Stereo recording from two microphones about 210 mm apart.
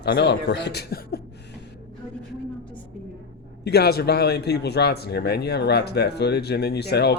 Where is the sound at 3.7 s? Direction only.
50° left (ahead or behind).